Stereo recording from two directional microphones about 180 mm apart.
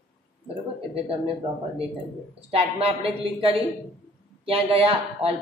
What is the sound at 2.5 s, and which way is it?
A man's voice, 35° right (ahead or behind).